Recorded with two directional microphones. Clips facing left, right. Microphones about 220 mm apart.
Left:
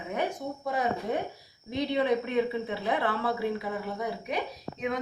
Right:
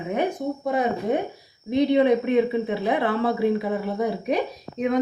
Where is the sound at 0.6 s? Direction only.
20° right (ahead or behind).